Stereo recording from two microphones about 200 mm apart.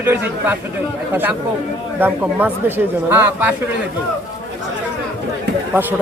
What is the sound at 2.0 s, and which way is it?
Speech, 10° right (ahead or behind).